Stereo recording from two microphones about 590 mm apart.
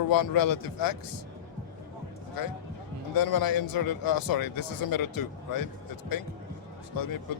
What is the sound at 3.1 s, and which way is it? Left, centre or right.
A man's voice, left.